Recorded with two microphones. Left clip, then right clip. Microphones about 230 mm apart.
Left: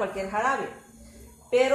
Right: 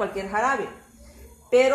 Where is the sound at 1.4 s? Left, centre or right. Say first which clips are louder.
Right 4 dB; right.